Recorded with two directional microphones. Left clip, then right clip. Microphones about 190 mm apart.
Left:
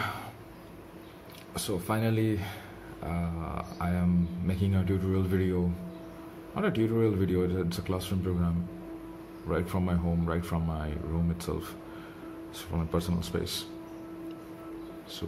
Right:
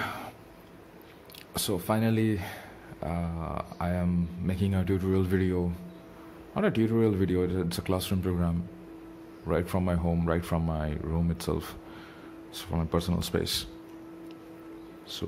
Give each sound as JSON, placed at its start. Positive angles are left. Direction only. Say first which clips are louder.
{"t": 0.0, "sound": "throat clearing", "louder": "even", "side_deg": -30}
{"t": 1.5, "sound": "speech", "louder": "right 3 dB", "side_deg": -45}